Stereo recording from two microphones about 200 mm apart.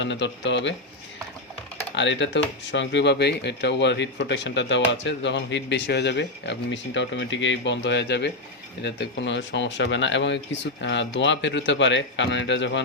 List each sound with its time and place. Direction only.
0.0 s speech: 60° left (ahead or behind)
2.0 s speech: 65° left (ahead or behind)